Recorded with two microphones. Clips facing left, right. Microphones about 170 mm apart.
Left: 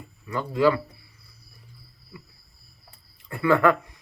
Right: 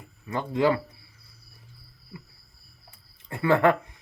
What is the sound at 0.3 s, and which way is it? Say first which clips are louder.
Speech: left 2 dB; 20° right (ahead or behind).